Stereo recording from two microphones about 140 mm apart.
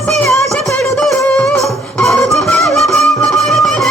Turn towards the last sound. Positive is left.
turn(degrees=0)  # may be behind; listen again after turning